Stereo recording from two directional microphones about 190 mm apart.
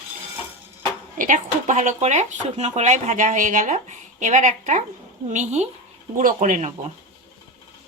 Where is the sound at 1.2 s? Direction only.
40° right (ahead or behind).